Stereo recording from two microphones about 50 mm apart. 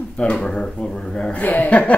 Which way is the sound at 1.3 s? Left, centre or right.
Left.